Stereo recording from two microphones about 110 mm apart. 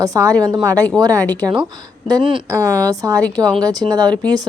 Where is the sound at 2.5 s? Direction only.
30° right (ahead or behind).